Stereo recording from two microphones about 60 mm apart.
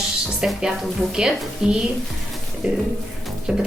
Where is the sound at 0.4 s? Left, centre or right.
Centre.